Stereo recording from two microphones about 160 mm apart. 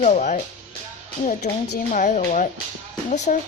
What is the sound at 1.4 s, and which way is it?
A child's voice, 45° left (ahead or behind).